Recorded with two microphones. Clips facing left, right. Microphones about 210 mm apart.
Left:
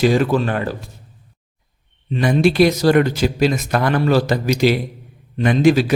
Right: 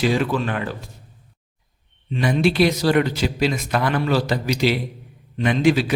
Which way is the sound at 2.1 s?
45° left (ahead or behind).